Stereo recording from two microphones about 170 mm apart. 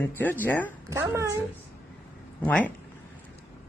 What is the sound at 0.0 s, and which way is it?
Speech, 10° left (ahead or behind).